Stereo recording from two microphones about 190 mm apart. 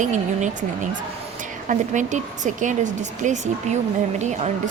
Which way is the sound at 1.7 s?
40° right (ahead or behind).